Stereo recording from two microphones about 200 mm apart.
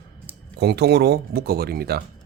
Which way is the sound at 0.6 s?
55° right (ahead or behind).